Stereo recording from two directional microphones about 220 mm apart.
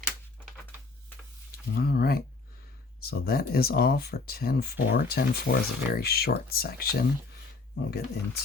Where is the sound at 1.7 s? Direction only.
45° left (ahead or behind).